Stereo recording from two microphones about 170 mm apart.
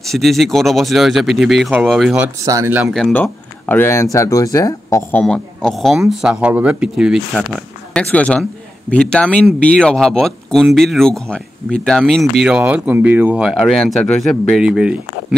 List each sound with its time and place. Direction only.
0.0 s speech: centre (ahead or behind)
2.4 s speech: 20° right (ahead or behind)
2.9 s speech: 5° left (ahead or behind)
5.2 s speech: 5° left (ahead or behind)
7.9 s speech: 5° left (ahead or behind)